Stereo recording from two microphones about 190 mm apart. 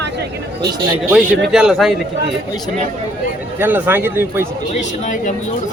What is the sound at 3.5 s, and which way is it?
Speech, 10° right (ahead or behind).